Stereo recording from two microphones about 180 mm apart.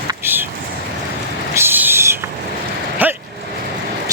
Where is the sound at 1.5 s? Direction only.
10° right (ahead or behind).